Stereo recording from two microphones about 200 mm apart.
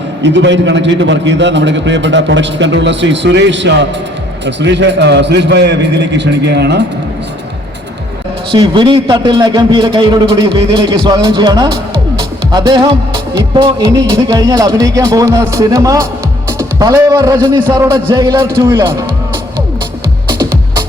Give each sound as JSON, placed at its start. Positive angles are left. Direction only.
{"t": 0.2, "sound": "a man's voice", "side_deg": -65}
{"t": 8.5, "sound": "a man's voice", "side_deg": -25}